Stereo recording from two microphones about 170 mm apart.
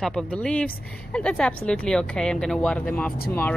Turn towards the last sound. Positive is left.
turn(degrees=10)  # may be behind; listen again after turning